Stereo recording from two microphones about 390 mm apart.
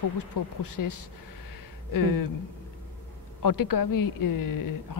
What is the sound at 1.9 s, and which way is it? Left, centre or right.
Speech, left.